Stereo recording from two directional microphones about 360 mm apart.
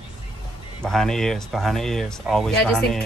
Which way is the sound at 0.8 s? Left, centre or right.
Centre.